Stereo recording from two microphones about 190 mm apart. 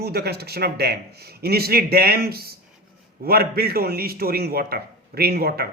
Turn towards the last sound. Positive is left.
turn(degrees=-55)  # may be behind; listen again after turning